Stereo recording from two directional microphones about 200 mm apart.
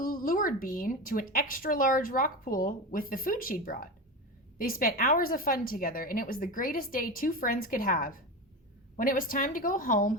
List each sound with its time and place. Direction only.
0.0 s speech: 45° left (ahead or behind)